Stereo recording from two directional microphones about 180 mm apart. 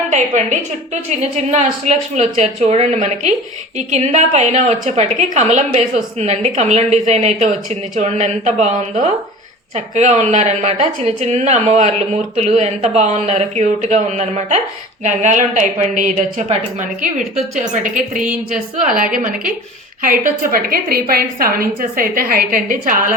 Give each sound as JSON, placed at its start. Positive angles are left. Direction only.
{"t": 1.2, "sound": "a woman's voice", "side_deg": -40}
{"t": 18.2, "sound": "speech", "side_deg": -5}
{"t": 18.8, "sound": "a woman's voice", "side_deg": -50}